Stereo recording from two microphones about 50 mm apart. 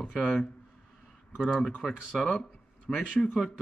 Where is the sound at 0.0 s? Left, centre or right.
Left.